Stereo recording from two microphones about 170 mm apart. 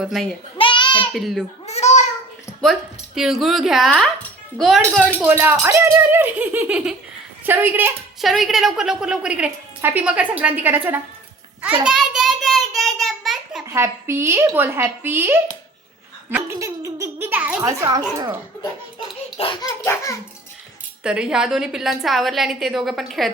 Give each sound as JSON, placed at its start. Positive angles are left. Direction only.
{"t": 0.0, "sound": "a woman's voice", "side_deg": 0}
{"t": 0.6, "sound": "a sound", "side_deg": 30}
{"t": 1.1, "sound": "a woman's voice", "side_deg": 0}
{"t": 1.6, "sound": "babbling", "side_deg": 40}
{"t": 2.5, "sound": "a sound", "side_deg": 15}
{"t": 3.2, "sound": "a woman's voice", "side_deg": 0}
{"t": 5.2, "sound": "speech", "side_deg": -10}
{"t": 8.2, "sound": "a woman's voice", "side_deg": 0}
{"t": 11.8, "sound": "a sound", "side_deg": -5}
{"t": 13.7, "sound": "speech", "side_deg": -15}
{"t": 16.3, "sound": "a sound", "side_deg": -15}
{"t": 19.4, "sound": "a child's voice", "side_deg": 30}
{"t": 19.8, "sound": "a child's voice", "side_deg": 15}
{"t": 21.0, "sound": "a woman's voice", "side_deg": -5}